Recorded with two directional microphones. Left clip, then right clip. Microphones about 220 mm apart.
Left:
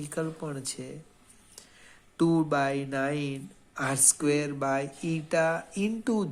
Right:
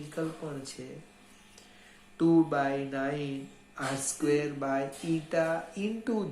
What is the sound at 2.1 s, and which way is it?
Speech, 50° left (ahead or behind).